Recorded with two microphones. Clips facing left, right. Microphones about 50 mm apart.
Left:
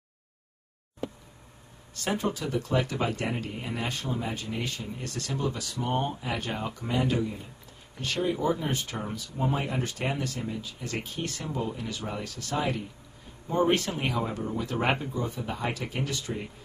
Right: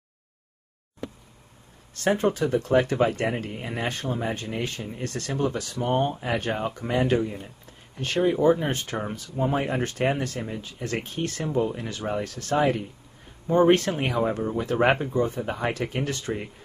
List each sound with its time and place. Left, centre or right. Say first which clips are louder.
2.0 s speech: right 7 dB; right